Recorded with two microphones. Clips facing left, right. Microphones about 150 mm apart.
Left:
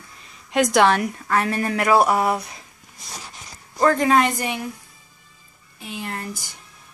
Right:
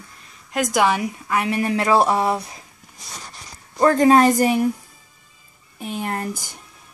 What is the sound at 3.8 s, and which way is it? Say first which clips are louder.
Speech: right 4 dB; 35° right (ahead or behind).